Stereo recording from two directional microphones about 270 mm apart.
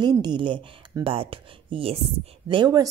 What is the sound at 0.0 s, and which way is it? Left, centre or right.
A woman's voice, centre.